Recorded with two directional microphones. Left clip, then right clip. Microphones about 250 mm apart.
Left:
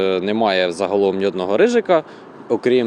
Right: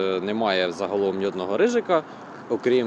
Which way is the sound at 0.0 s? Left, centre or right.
Left.